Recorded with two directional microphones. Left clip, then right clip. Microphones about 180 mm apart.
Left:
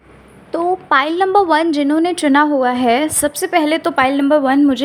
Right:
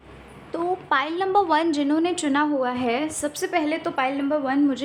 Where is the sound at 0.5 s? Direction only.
40° left (ahead or behind).